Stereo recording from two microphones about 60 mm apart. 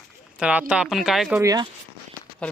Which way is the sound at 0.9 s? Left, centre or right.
Centre.